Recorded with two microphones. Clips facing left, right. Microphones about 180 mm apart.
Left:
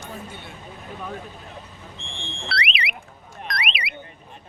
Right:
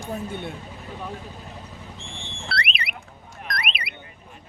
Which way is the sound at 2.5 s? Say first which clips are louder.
Left 1 dB; 50° right (ahead or behind).